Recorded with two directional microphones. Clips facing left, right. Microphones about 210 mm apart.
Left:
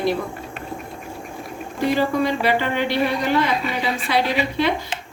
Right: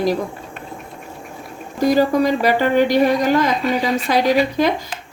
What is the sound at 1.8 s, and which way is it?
A woman's voice, 40° right (ahead or behind).